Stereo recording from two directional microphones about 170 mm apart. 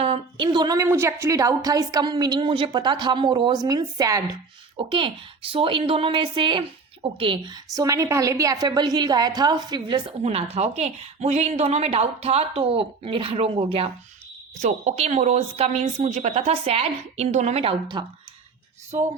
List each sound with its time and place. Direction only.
0.0 s a woman's voice: 30° right (ahead or behind)